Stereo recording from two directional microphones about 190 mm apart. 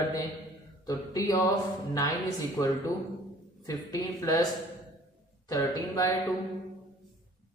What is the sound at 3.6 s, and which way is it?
Speech, 20° left (ahead or behind).